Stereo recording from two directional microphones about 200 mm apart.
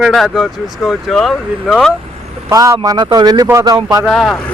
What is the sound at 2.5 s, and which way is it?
Speech, 15° right (ahead or behind).